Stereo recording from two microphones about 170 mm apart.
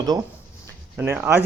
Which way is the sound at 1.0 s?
10° right (ahead or behind).